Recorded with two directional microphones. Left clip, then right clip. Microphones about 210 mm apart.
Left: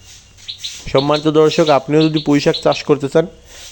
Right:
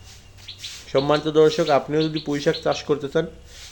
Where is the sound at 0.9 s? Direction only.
35° left (ahead or behind).